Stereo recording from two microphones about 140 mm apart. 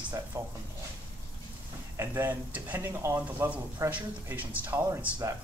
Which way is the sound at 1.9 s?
20° right (ahead or behind).